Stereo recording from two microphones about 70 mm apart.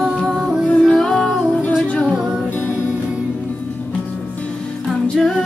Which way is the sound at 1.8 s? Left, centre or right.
Centre.